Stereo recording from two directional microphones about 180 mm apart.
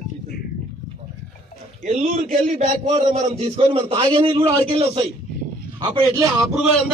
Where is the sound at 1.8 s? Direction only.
35° right (ahead or behind).